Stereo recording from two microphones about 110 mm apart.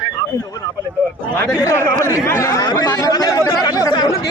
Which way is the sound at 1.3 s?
15° left (ahead or behind).